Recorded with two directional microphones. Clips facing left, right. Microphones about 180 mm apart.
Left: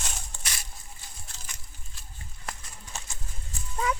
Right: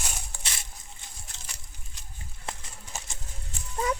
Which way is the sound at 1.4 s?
20° right (ahead or behind).